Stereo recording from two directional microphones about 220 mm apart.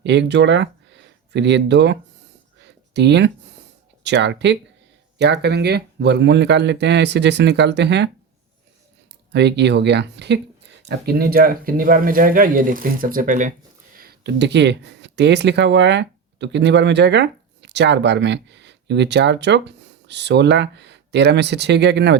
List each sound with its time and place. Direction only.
0.0 s speech: 50° right (ahead or behind)
2.6 s a sound: 50° right (ahead or behind)
4.0 s speech: 50° right (ahead or behind)
9.3 s speech: 50° right (ahead or behind)